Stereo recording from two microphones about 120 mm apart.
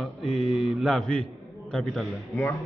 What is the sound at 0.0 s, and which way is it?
Mantra, centre (ahead or behind).